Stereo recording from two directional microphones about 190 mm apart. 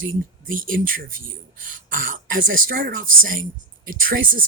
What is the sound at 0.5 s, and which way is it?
Speech, 50° right (ahead or behind).